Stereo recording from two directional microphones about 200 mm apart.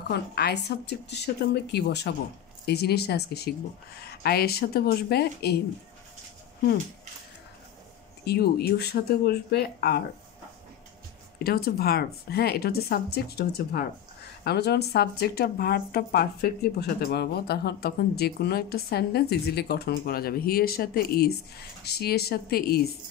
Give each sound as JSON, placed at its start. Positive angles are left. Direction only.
{"t": 0.1, "sound": "a woman's voice", "side_deg": 55}
{"t": 8.3, "sound": "speech", "side_deg": 50}
{"t": 11.3, "sound": "speech", "side_deg": 50}